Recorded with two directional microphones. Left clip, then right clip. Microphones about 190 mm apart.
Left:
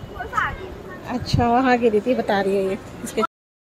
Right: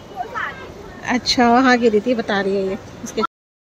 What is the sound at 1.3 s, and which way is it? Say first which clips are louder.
A woman's voice: right 4 dB; 15° right (ahead or behind).